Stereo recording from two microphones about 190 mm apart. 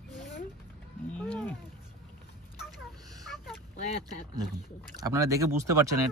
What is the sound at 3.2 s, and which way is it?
Vehicle, centre (ahead or behind).